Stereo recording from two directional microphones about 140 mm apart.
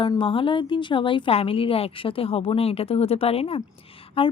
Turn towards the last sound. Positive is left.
turn(degrees=40)  # may be behind; listen again after turning